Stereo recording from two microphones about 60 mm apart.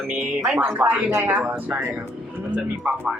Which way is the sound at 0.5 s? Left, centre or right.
Right.